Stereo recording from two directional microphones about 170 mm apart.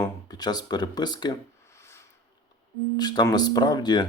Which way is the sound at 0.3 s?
25° left (ahead or behind).